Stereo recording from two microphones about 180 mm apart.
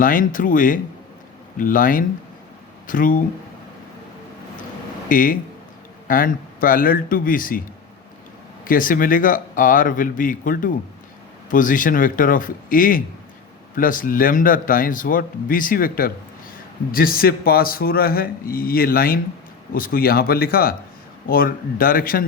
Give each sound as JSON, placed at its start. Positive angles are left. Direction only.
{"t": 0.0, "sound": "a man's voice", "side_deg": 50}
{"t": 5.0, "sound": "a man's voice", "side_deg": 50}
{"t": 8.6, "sound": "a man's voice", "side_deg": 50}